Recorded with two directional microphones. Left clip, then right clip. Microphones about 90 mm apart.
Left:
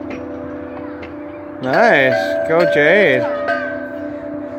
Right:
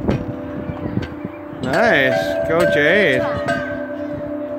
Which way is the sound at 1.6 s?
10° right (ahead or behind).